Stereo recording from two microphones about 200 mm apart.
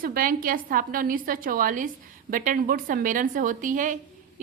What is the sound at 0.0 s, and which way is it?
A woman's voice, 45° right (ahead or behind).